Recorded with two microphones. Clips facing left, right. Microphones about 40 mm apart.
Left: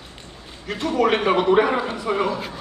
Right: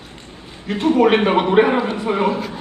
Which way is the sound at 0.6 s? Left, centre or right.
Right.